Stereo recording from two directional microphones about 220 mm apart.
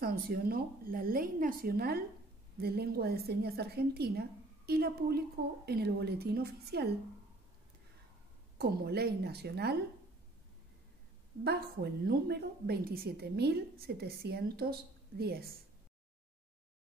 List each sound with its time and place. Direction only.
0.0 s a woman's voice: 40° right (ahead or behind)
8.5 s a woman's voice: 45° right (ahead or behind)
11.4 s a woman's voice: 45° right (ahead or behind)